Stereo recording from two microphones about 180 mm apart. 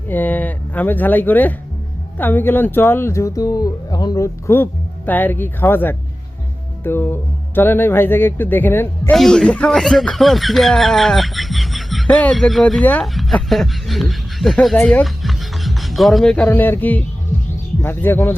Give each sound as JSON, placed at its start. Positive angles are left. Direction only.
{"t": 0.1, "sound": "speech", "side_deg": 10}